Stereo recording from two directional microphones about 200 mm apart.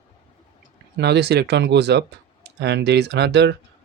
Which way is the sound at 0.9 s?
55° right (ahead or behind).